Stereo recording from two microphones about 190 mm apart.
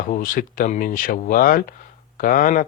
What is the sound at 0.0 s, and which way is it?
Speech, 45° left (ahead or behind).